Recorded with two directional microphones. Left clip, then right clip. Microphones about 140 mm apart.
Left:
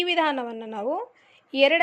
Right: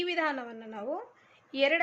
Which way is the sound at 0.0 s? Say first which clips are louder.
Left 7 dB; 60° left (ahead or behind).